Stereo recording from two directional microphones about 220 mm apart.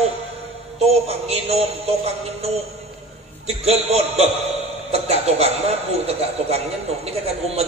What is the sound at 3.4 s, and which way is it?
A man's voice, 30° right (ahead or behind).